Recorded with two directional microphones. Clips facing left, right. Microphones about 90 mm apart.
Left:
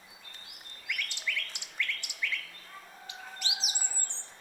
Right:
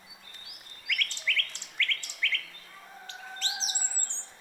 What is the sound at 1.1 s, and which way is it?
Bird, 15° left (ahead or behind).